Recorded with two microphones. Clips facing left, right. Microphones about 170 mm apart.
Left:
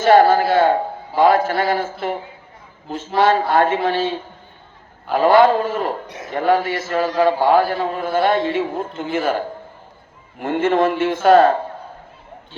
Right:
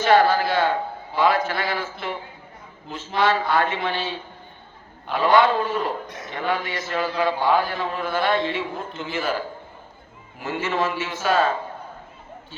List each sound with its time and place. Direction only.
0.0 s a man's voice: 45° left (ahead or behind)
3.2 s a man's voice: 45° left (ahead or behind)
10.4 s a man's voice: 55° left (ahead or behind)